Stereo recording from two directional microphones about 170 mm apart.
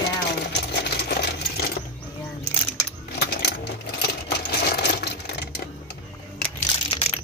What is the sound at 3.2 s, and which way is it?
Coin, 70° left (ahead or behind).